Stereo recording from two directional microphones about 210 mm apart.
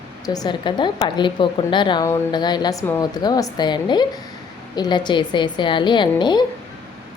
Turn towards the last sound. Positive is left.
turn(degrees=20)  # may be behind; listen again after turning